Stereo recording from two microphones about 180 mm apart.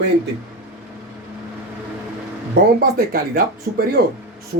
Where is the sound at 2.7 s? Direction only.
55° right (ahead or behind).